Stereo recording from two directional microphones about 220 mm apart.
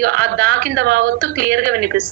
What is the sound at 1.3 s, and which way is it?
Speech, 40° right (ahead or behind).